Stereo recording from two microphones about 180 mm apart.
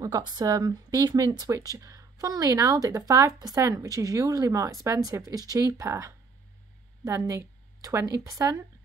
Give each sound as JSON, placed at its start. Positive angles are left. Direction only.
{"t": 0.0, "sound": "speech", "side_deg": -20}